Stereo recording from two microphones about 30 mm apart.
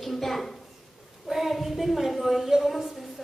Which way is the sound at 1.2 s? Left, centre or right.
Centre.